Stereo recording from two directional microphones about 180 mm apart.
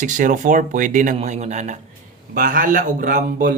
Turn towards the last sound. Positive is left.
turn(degrees=-50)  # may be behind; listen again after turning